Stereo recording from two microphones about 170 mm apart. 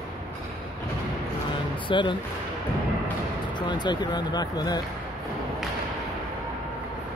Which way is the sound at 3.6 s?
25° left (ahead or behind).